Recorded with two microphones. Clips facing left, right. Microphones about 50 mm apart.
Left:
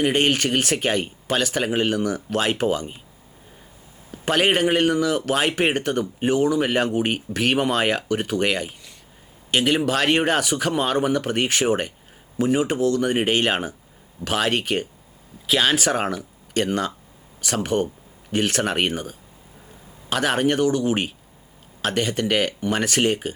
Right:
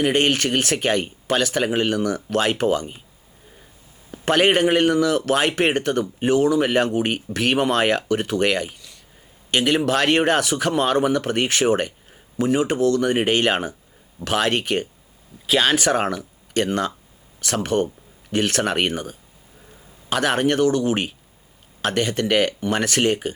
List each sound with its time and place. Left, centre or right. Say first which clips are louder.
0.0 s speech: right 1 dB; centre
2.0 s speech: right 2 dB; centre
4.1 s speech: right 2 dB; centre
20.1 s speech: right 1 dB; centre
20.6 s speech: right 1 dB; centre
22.6 s speech: right 1 dB; centre